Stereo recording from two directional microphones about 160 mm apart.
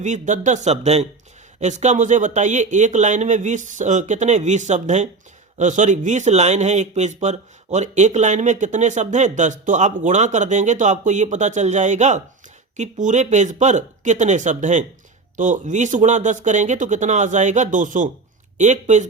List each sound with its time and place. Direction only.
0.0 s speech: 50° right (ahead or behind)